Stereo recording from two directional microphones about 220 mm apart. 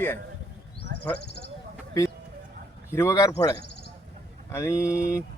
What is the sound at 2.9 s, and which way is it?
Speech, 15° left (ahead or behind).